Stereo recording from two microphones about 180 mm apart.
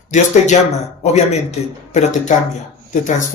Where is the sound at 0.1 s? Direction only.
40° left (ahead or behind).